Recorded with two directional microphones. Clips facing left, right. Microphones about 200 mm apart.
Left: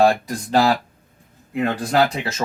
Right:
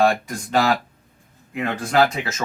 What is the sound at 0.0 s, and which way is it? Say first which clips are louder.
Speech: left 2 dB; 35° left (ahead or behind).